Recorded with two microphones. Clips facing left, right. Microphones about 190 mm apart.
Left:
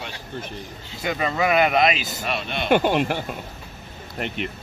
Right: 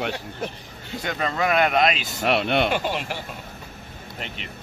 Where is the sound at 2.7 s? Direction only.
60° left (ahead or behind).